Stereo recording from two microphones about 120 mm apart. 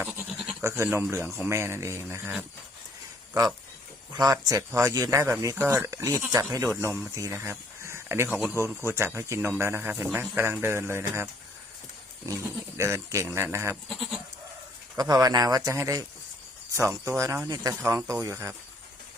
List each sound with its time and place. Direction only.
0.3 s goat: 5° right (ahead or behind)
0.6 s speech: 25° right (ahead or behind)
0.9 s speech: 15° right (ahead or behind)
4.2 s speech: 30° right (ahead or behind)
13.8 s goat: centre (ahead or behind)
14.9 s speech: 30° right (ahead or behind)